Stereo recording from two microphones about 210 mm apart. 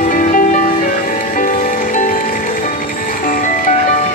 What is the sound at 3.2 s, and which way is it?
Music, 40° left (ahead or behind).